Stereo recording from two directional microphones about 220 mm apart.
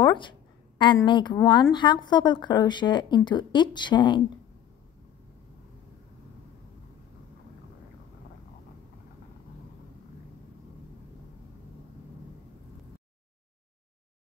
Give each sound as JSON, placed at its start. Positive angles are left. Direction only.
{"t": 0.0, "sound": "a woman's voice", "side_deg": 20}